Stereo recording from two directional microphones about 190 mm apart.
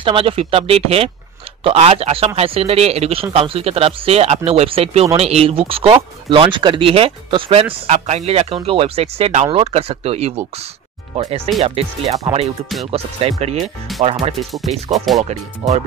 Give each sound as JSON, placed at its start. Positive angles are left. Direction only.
{"t": 0.0, "sound": "a man's voice", "side_deg": -30}
{"t": 13.9, "sound": "speech", "side_deg": 0}
{"t": 14.7, "sound": "a man's voice", "side_deg": -35}
{"t": 15.1, "sound": "speech", "side_deg": 0}
{"t": 15.6, "sound": "a man's voice", "side_deg": -35}